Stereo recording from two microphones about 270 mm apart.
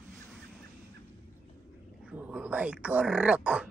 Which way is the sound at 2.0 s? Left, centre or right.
Centre.